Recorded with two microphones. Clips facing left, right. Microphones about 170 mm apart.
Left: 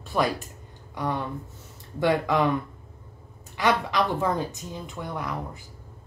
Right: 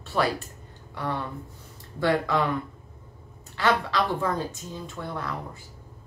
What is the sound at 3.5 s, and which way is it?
Speech, 15° left (ahead or behind).